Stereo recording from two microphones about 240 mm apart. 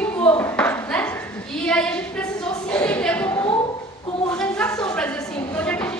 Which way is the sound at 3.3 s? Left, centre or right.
Centre.